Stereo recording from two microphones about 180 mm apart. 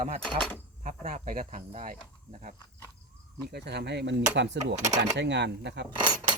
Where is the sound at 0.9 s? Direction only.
50° right (ahead or behind).